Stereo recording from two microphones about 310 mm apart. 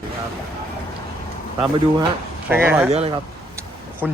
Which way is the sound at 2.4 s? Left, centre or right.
Centre.